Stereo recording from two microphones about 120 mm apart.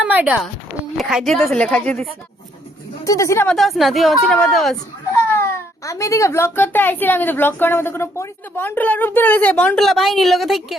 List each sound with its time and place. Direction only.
0.0 s a sound: 15° right (ahead or behind)
0.9 s speech: centre (ahead or behind)
3.0 s speech: 25° left (ahead or behind)
3.5 s speech: centre (ahead or behind)
5.3 s speech: 25° left (ahead or behind)
9.8 s speech: centre (ahead or behind)